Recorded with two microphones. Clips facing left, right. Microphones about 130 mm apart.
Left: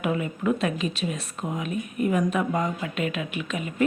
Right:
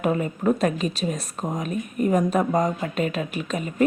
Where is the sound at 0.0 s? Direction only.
40° right (ahead or behind).